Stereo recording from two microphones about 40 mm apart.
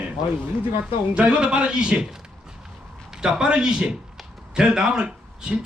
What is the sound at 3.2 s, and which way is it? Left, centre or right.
A man's voice, centre.